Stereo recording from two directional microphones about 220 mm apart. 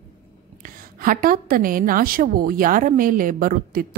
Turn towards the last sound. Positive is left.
turn(degrees=-40)  # may be behind; listen again after turning